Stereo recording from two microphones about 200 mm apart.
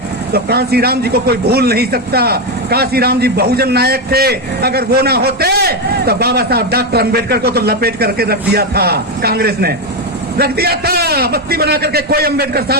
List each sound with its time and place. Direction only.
0.3 s speech: 50° right (ahead or behind)